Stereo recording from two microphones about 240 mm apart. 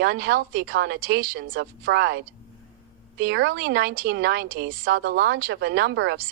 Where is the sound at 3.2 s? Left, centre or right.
Right.